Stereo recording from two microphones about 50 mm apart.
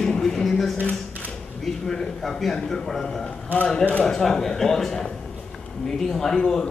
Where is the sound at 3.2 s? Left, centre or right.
Left.